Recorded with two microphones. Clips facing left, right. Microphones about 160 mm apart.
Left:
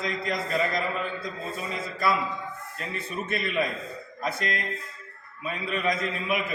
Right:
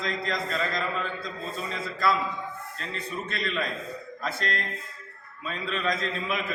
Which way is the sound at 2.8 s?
15° left (ahead or behind).